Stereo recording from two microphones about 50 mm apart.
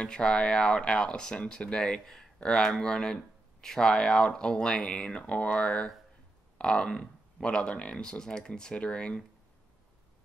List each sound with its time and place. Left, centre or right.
0.0 s speech: centre